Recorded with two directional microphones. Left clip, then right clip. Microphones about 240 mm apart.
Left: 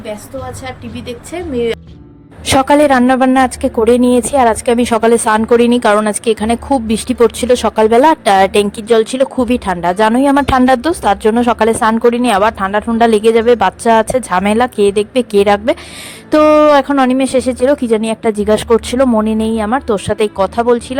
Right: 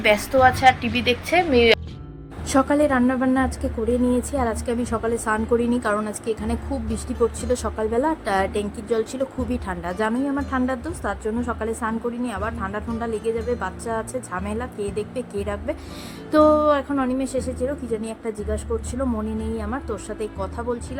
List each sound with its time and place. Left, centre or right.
0.6 s speech: centre
2.5 s speech: left